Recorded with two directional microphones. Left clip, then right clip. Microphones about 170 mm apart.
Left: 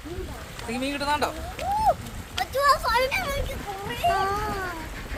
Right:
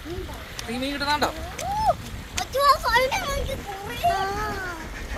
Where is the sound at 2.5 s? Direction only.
45° right (ahead or behind).